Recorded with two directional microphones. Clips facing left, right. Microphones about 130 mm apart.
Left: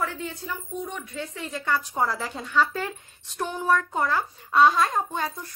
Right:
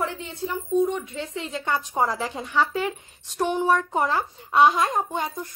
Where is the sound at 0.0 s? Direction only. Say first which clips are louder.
Right 2 dB; 25° right (ahead or behind).